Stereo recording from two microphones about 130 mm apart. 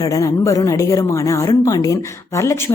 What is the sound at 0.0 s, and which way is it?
A woman's voice, 25° left (ahead or behind).